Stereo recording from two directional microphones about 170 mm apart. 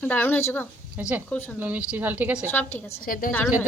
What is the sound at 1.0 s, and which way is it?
Speech, 10° right (ahead or behind).